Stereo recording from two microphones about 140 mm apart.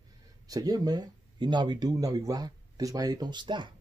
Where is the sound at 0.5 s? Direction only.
25° right (ahead or behind).